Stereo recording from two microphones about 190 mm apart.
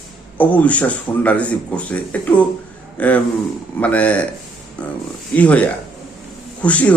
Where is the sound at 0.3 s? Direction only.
10° left (ahead or behind).